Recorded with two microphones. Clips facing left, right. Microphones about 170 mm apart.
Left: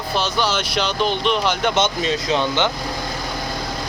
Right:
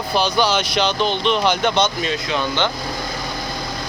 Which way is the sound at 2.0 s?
30° left (ahead or behind).